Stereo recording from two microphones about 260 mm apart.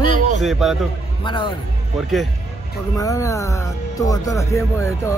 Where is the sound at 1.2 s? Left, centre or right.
Centre.